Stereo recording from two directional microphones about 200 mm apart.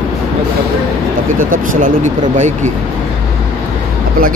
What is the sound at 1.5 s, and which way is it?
Speech, 40° right (ahead or behind).